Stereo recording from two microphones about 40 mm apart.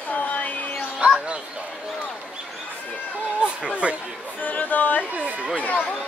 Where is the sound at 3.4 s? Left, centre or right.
Right.